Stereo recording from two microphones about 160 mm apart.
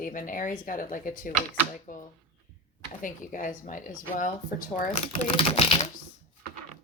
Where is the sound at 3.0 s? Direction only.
55° left (ahead or behind).